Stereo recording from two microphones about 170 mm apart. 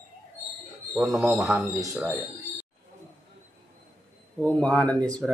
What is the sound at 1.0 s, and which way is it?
Speech, 5° right (ahead or behind).